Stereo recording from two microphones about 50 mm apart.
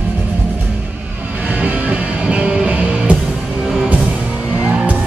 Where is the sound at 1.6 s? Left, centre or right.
Right.